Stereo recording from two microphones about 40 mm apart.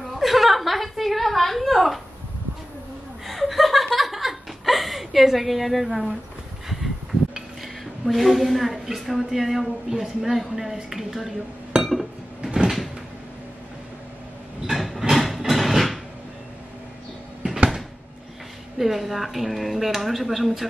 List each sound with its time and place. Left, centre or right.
0.0 s a sound: centre
3.3 s chuckle: centre
7.6 s a woman's voice: centre
11.8 s chink: centre
12.4 s cupboard open or close: right
12.6 s cupboard open or close: centre
14.7 s a sound: centre
18.8 s a woman's voice: centre